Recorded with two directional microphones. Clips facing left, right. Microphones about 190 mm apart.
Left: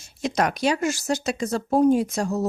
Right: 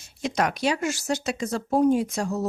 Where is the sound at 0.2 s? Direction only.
40° left (ahead or behind).